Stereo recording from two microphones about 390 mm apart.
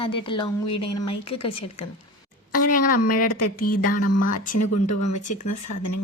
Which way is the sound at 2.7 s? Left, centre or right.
Left.